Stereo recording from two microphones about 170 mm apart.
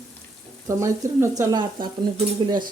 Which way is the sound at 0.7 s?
15° right (ahead or behind).